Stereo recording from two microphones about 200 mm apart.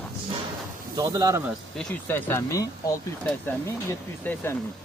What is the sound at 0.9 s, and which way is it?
Speech, 20° right (ahead or behind).